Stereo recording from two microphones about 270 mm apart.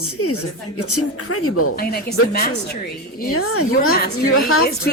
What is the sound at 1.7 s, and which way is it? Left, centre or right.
Speech, left.